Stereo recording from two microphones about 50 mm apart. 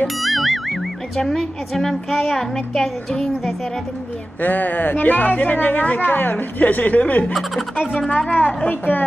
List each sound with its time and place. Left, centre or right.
0.0 s music: centre
1.1 s a woman's voice: centre
4.4 s a woman's voice: left